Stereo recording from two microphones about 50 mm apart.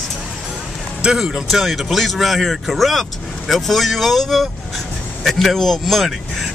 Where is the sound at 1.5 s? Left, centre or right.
Centre.